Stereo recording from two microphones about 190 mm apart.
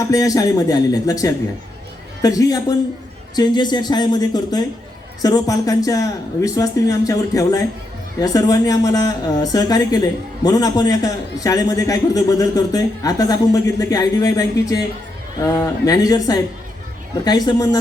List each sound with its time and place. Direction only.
0.1 s a man's voice: 20° left (ahead or behind)